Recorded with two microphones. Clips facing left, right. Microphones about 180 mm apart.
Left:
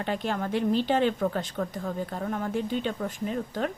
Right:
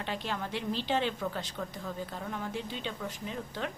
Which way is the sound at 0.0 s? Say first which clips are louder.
Left 6 dB; 50° left (ahead or behind).